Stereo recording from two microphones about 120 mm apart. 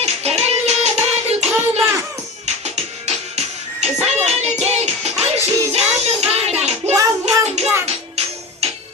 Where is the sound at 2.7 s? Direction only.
65° right (ahead or behind).